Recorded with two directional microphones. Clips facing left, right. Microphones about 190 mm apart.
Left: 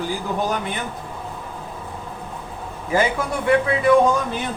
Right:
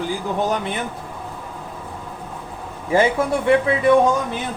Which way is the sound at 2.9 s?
25° right (ahead or behind).